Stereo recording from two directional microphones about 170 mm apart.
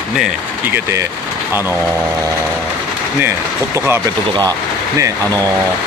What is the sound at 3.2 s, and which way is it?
Speech, 15° right (ahead or behind).